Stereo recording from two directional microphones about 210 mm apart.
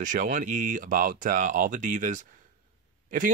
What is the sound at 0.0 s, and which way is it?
Speech, 40° right (ahead or behind).